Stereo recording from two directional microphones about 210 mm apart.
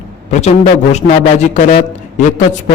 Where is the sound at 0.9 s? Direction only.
35° left (ahead or behind).